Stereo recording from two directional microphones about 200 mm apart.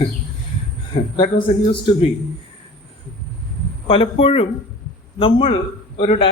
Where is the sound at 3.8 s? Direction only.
30° left (ahead or behind).